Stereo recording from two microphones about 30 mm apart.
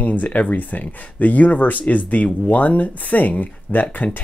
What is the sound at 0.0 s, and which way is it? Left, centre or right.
Speech, left.